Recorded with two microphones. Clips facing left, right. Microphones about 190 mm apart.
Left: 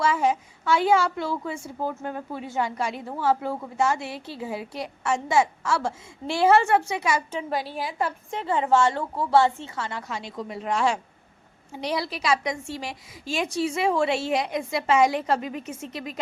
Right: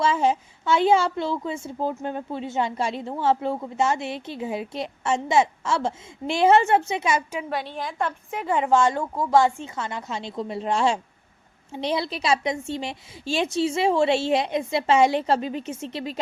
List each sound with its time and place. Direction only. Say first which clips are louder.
0.0 s a woman's voice: right 1 dB; 25° right (ahead or behind)
7.3 s a woman's voice: even; 10° right (ahead or behind)
7.6 s a woman's voice: even; 5° left (ahead or behind)
8.3 s a woman's voice: right 1 dB; 15° right (ahead or behind); by 16.2 s 30° right (ahead or behind)